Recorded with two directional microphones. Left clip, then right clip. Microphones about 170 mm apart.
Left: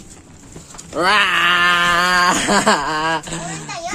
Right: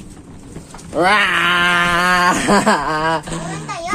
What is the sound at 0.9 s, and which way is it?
Speech, 15° left (ahead or behind).